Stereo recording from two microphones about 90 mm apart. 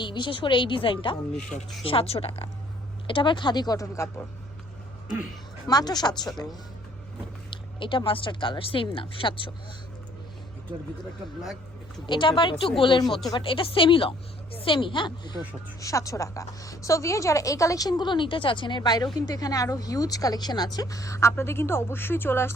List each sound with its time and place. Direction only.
0.0 s a woman's voice: 60° left (ahead or behind)
1.8 s speech: 90° left
3.1 s speech: 65° left (ahead or behind); by 4.1 s 40° left (ahead or behind)
5.6 s speech: 50° left (ahead or behind)
7.5 s a woman's voice: 70° left (ahead or behind)
12.0 s a woman's voice: 65° left (ahead or behind)
15.8 s a woman's voice: 35° left (ahead or behind)